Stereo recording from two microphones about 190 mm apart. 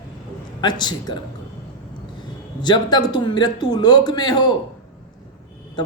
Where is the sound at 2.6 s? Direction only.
20° left (ahead or behind).